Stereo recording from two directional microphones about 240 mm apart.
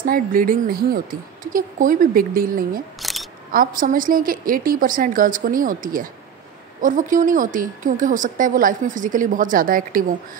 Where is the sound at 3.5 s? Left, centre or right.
Right.